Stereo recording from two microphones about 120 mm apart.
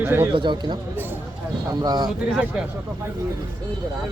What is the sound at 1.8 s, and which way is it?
Speech, 35° right (ahead or behind).